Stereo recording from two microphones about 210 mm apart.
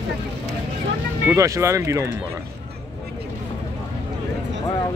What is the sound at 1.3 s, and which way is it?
Speech, 15° right (ahead or behind).